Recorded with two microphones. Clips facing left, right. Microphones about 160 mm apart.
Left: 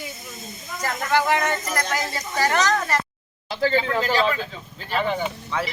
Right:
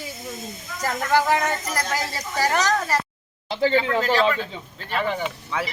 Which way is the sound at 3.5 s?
25° right (ahead or behind).